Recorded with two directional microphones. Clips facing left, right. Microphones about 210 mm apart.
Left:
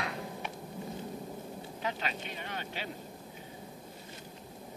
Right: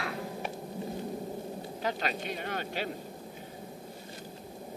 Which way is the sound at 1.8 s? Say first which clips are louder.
Right 4 dB; 40° right (ahead or behind).